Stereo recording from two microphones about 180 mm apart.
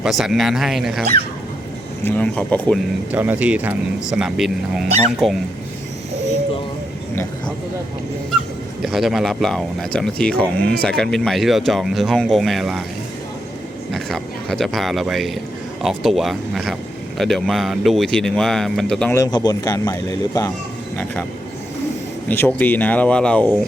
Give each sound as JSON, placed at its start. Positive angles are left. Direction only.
{"t": 0.0, "sound": "speech", "side_deg": 0}
{"t": 2.0, "sound": "speech", "side_deg": 10}
{"t": 3.1, "sound": "speech", "side_deg": -10}
{"t": 8.8, "sound": "speech", "side_deg": 0}
{"t": 13.9, "sound": "speech", "side_deg": 0}
{"t": 19.1, "sound": "speech", "side_deg": 20}
{"t": 22.3, "sound": "speech", "side_deg": 10}